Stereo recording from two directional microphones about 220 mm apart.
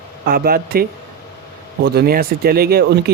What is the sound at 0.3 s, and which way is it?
Speech, 45° right (ahead or behind).